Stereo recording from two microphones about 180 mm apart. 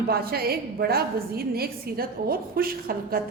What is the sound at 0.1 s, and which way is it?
A woman's voice, 60° right (ahead or behind).